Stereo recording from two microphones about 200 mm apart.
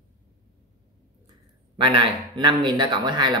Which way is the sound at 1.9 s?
25° right (ahead or behind).